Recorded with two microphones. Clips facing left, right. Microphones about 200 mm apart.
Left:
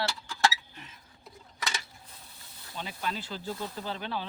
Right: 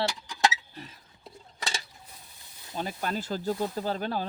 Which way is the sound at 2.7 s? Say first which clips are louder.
Right 4 dB; 45° right (ahead or behind).